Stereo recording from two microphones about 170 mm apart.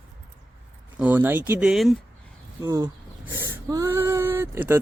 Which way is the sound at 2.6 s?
20° right (ahead or behind).